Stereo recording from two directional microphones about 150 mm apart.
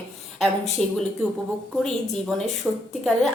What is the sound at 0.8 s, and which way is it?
Speech, centre (ahead or behind).